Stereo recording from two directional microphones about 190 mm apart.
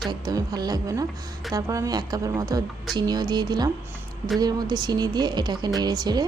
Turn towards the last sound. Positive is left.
turn(degrees=-20)  # may be behind; listen again after turning